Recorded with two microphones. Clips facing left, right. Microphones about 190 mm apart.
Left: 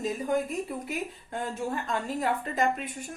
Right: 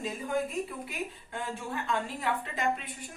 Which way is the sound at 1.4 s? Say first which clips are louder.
Left 4 dB; 45° left (ahead or behind).